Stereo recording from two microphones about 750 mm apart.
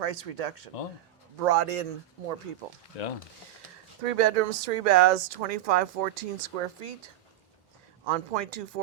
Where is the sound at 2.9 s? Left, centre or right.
Left.